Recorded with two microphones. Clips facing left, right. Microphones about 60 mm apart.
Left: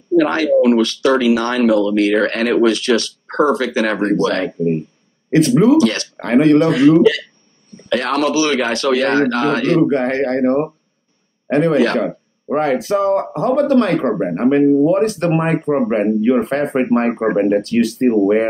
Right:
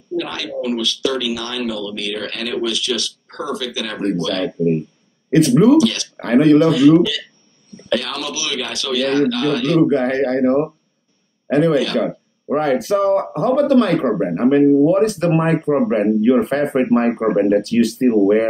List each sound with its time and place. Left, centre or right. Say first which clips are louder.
0.1 s speech: left 11 dB; left
14.6 s speech: right 1 dB; centre
14.9 s speech: even; left